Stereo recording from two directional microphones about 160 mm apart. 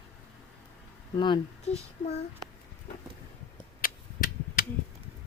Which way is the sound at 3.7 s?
65° left (ahead or behind).